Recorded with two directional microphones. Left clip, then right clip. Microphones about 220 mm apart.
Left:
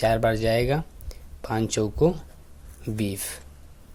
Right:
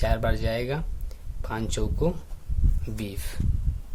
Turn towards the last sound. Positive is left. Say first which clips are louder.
# left 6 dB
turn(degrees=20)  # may be behind; listen again after turning